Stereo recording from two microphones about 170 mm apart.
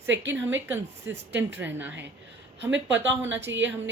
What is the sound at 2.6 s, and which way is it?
Speech, 90° right.